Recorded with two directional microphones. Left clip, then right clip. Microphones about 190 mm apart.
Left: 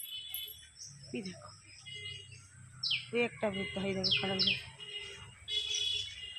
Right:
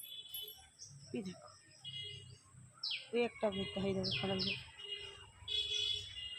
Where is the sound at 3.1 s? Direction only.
25° left (ahead or behind).